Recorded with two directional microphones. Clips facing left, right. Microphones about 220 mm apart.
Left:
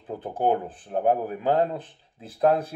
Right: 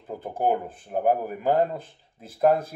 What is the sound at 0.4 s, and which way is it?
Speech, 10° right (ahead or behind).